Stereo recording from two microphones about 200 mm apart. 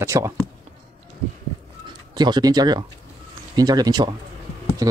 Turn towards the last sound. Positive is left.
turn(degrees=-15)  # may be behind; listen again after turning